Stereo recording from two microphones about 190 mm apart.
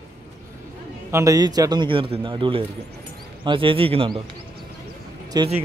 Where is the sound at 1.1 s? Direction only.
20° right (ahead or behind).